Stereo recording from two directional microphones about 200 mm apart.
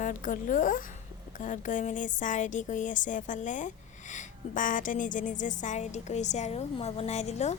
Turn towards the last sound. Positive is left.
turn(degrees=35)  # may be behind; listen again after turning